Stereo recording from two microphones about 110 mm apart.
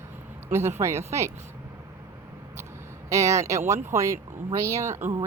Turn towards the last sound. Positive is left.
turn(degrees=-25)  # may be behind; listen again after turning